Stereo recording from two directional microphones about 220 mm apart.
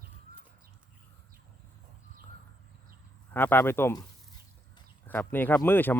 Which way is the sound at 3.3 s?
10° left (ahead or behind).